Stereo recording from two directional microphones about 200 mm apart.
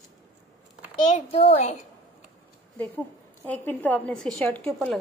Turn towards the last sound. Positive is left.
turn(degrees=5)  # may be behind; listen again after turning